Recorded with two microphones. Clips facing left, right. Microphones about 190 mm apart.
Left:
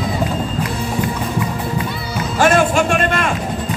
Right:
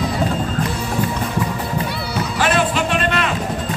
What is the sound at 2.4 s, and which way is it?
Music, 45° left (ahead or behind).